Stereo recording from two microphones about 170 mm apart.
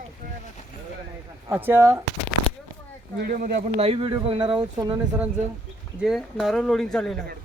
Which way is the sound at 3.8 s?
35° right (ahead or behind).